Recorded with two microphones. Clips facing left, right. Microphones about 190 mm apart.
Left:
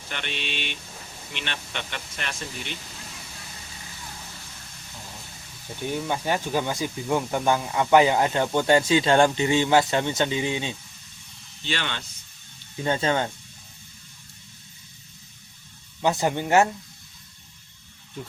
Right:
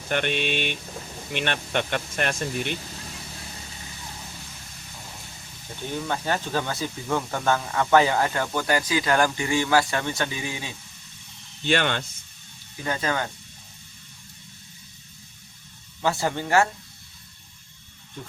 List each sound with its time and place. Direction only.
0.1 s speech: 50° right (ahead or behind)
6.1 s speech: 15° left (ahead or behind)
11.6 s speech: 55° right (ahead or behind)
12.8 s speech: 25° left (ahead or behind)
16.0 s speech: 20° left (ahead or behind)
18.2 s speech: 5° left (ahead or behind)